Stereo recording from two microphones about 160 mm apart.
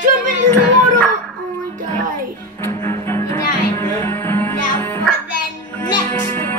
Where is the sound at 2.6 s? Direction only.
15° left (ahead or behind).